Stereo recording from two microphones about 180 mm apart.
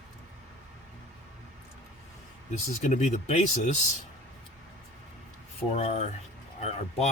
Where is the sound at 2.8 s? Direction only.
40° left (ahead or behind).